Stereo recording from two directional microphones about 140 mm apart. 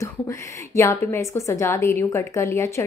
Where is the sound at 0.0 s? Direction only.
20° left (ahead or behind).